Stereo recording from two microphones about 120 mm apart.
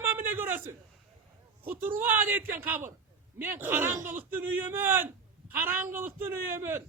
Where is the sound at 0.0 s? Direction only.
15° right (ahead or behind).